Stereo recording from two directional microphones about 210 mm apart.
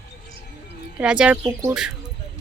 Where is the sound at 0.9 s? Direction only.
5° right (ahead or behind).